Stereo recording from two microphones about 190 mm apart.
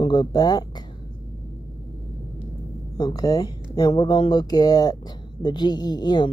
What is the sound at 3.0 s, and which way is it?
Speech, 20° left (ahead or behind).